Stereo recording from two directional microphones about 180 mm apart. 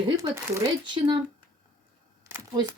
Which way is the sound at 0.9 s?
25° right (ahead or behind).